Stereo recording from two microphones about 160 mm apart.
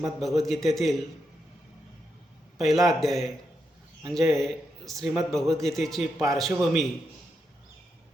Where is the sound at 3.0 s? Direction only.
Centre (ahead or behind).